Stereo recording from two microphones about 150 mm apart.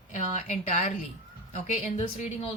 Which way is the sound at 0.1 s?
50° left (ahead or behind).